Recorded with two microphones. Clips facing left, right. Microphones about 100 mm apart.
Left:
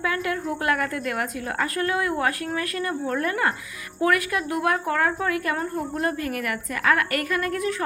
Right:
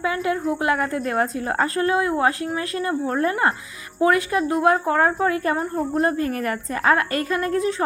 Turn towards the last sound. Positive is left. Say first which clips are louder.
# right 4 dB
turn(degrees=-25)  # may be behind; listen again after turning